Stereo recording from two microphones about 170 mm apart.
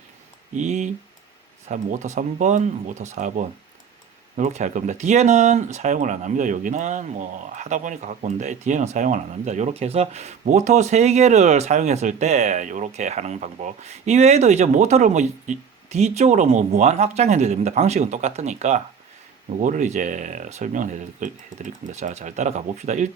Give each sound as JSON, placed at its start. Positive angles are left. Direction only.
{"t": 0.5, "sound": "speech", "side_deg": -45}